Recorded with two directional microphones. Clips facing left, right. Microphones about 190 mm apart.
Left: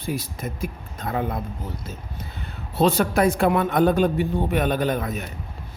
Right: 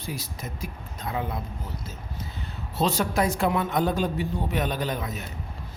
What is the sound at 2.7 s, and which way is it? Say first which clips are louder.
A man's voice: left 5 dB; 60° left (ahead or behind).